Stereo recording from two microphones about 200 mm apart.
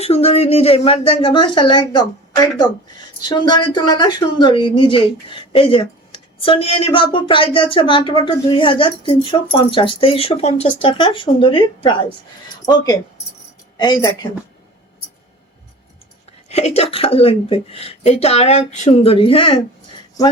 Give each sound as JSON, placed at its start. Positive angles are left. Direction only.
{"t": 0.0, "sound": "speech", "side_deg": 30}
{"t": 16.5, "sound": "speech", "side_deg": 30}